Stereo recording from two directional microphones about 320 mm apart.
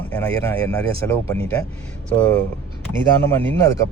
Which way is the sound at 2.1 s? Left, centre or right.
Centre.